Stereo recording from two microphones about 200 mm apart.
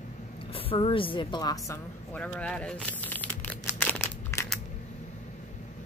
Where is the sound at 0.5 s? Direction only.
25° left (ahead or behind).